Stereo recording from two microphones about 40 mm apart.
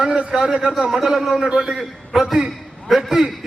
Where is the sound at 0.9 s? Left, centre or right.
Centre.